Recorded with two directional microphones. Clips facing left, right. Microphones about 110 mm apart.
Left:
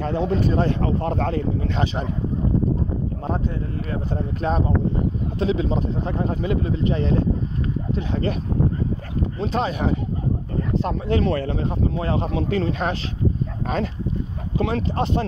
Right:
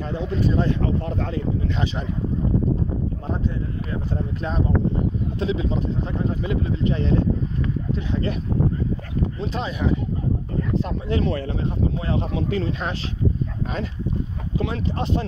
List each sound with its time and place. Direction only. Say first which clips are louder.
0.0 s speech: left 3 dB; 55° left (ahead or behind)
3.9 s speech: left 1 dB; 50° left (ahead or behind)
9.4 s speech: left 7 dB; 55° left (ahead or behind)
11.5 s speech: left 1 dB; 45° left (ahead or behind)
14.6 s speech: left 4 dB; 55° left (ahead or behind)